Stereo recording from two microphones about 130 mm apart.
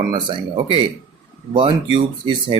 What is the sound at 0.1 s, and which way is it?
Speech, 40° right (ahead or behind).